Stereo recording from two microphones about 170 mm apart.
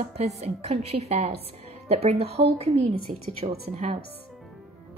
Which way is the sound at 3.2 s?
60° right (ahead or behind).